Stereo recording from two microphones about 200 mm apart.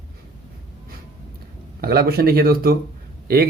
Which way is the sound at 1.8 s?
50° right (ahead or behind).